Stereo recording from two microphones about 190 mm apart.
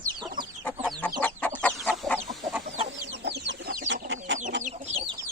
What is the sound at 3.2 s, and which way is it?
Chicken, 55° right (ahead or behind).